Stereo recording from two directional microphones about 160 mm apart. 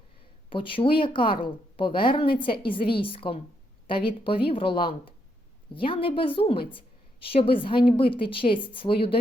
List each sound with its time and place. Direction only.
0.5 s a woman's voice: 35° left (ahead or behind)